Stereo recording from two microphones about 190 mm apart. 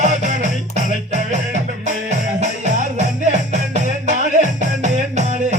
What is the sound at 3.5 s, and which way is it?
Music, 40° right (ahead or behind).